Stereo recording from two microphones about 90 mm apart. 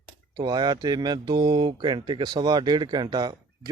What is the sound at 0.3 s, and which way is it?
Speech, 50° right (ahead or behind).